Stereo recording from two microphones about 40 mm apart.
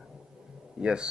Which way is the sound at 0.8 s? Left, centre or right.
Right.